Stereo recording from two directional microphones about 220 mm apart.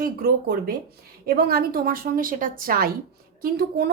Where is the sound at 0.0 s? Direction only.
45° right (ahead or behind).